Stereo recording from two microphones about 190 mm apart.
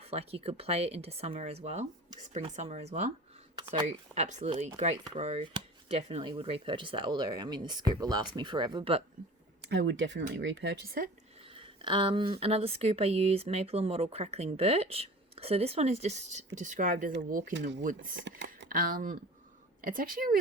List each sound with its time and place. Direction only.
0.0 s speech: 30° right (ahead or behind)
3.8 s speech: 40° right (ahead or behind)
4.9 s speech: 20° right (ahead or behind)
5.2 s speech: 30° right (ahead or behind)
9.6 s speech: 65° right (ahead or behind)
11.5 s speech: 25° right (ahead or behind); by 18.2 s 45° right (ahead or behind)
18.3 s a sound: 70° right (ahead or behind)
18.7 s speech: 50° right (ahead or behind)